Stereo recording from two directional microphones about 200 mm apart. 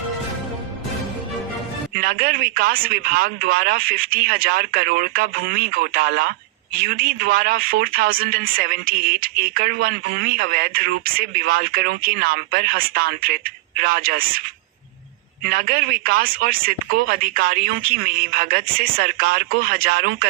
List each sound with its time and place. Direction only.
2.0 s speech: 50° right (ahead or behind)
15.4 s speech: 50° right (ahead or behind)